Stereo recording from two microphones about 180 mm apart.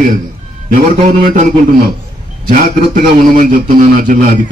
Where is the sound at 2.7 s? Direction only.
55° right (ahead or behind).